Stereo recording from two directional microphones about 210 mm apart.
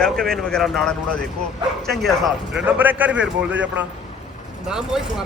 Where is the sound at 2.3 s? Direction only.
5° right (ahead or behind).